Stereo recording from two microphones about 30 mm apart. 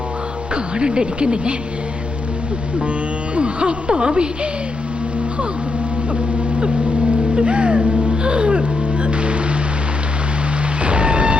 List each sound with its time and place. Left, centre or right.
0.5 s speech: right
3.3 s speech: right
7.3 s music: right
10.8 s music: right